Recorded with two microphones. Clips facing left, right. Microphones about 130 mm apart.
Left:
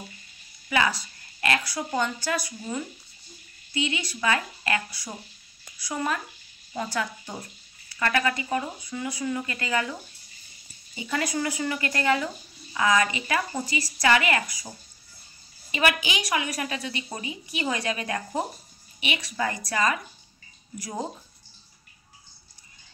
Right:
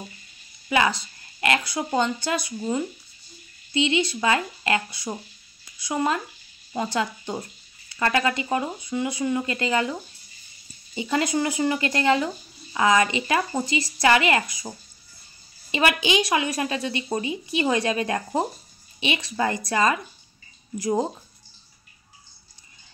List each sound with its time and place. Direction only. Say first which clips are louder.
0.7 s a woman's voice: right 3 dB; 25° right (ahead or behind)
11.0 s a woman's voice: right 5 dB; 25° right (ahead or behind)
15.7 s a woman's voice: right 4 dB; 25° right (ahead or behind)